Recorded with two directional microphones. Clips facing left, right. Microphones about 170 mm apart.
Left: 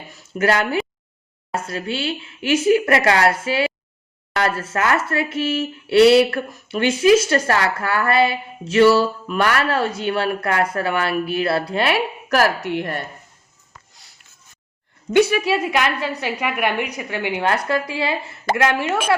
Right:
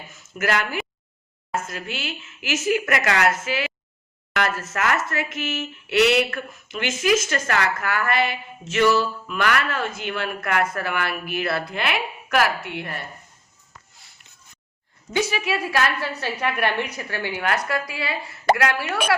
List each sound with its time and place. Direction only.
0.1 s speech: 30° left (ahead or behind)
15.1 s speech: 60° left (ahead or behind)
15.5 s a woman's voice: 20° left (ahead or behind)